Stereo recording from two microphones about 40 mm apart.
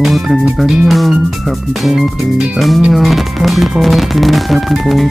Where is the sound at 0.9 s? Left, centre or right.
Centre.